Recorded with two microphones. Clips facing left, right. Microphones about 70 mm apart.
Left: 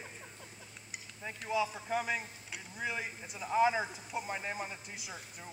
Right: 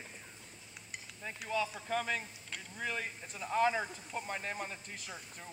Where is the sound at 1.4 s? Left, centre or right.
Centre.